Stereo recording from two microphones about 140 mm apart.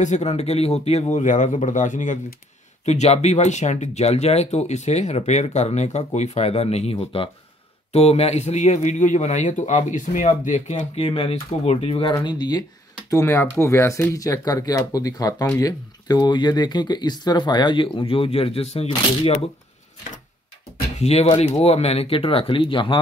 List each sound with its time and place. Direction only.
0.0 s speech: 55° left (ahead or behind)
12.2 s speech: 30° left (ahead or behind)
13.1 s speech: 20° left (ahead or behind); by 19.4 s 45° left (ahead or behind)
21.0 s speech: 50° left (ahead or behind)